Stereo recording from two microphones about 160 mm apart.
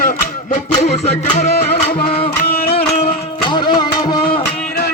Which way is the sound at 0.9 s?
45° left (ahead or behind).